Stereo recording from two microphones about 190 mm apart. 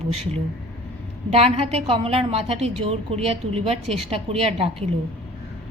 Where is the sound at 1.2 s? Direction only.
30° right (ahead or behind).